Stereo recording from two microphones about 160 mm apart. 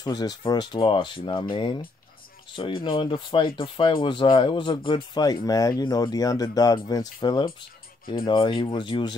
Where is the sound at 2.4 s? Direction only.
30° left (ahead or behind).